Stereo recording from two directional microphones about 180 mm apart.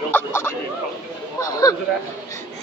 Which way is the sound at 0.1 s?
15° left (ahead or behind).